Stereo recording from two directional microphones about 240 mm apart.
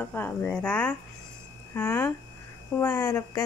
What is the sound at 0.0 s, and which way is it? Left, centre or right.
Speech, centre.